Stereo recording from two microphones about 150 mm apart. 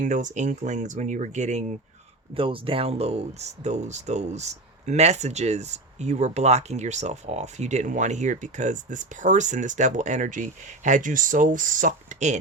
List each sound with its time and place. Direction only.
0.0 s speech: 55° right (ahead or behind)
2.3 s speech: 35° right (ahead or behind); by 12.4 s 55° right (ahead or behind)